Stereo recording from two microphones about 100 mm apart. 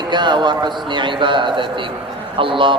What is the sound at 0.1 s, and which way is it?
A man's voice, 50° right (ahead or behind).